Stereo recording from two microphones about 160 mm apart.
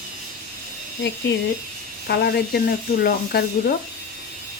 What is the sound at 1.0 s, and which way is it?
Speech, 90° left.